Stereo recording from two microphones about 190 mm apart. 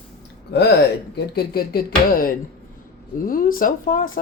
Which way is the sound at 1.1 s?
55° left (ahead or behind).